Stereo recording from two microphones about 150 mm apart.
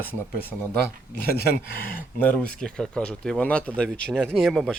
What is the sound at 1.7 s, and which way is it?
A man's voice, 15° left (ahead or behind).